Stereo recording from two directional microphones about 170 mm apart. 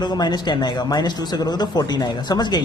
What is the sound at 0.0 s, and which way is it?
A man's voice, 25° left (ahead or behind).